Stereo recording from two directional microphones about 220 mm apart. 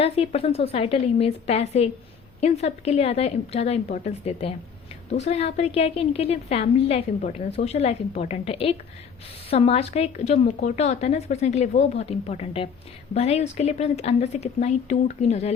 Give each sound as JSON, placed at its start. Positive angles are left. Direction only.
{"t": 0.0, "sound": "a woman's voice", "side_deg": 25}